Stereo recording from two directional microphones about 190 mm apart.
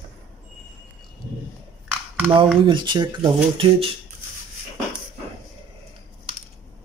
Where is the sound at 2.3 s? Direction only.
25° right (ahead or behind).